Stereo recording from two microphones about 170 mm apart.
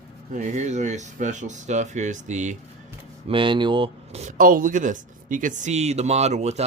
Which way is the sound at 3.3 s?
30° right (ahead or behind).